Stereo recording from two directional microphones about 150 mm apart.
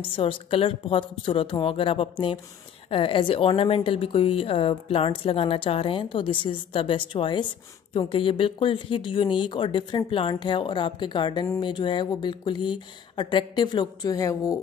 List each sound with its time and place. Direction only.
0.0 s a woman's voice: 35° left (ahead or behind)